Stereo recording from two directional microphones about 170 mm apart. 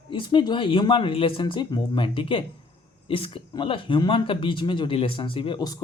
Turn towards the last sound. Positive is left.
turn(degrees=25)  # may be behind; listen again after turning